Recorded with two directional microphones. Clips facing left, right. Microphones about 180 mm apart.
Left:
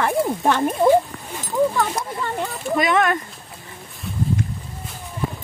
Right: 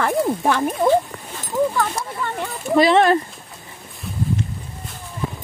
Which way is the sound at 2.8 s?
30° right (ahead or behind).